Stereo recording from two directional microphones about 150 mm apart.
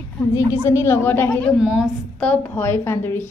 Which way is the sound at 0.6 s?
20° left (ahead or behind).